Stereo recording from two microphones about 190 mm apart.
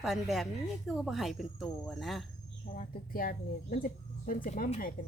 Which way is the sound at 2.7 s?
45° left (ahead or behind).